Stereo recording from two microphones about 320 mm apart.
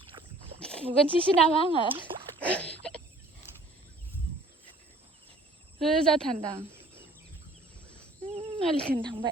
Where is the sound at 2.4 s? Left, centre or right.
Centre.